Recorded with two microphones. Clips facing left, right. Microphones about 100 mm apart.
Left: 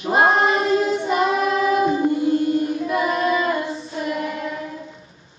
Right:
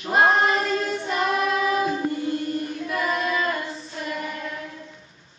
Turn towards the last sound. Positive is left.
turn(degrees=10)  # may be behind; listen again after turning